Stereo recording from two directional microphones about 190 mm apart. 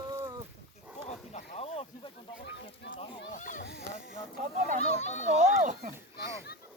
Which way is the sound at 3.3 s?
40° left (ahead or behind).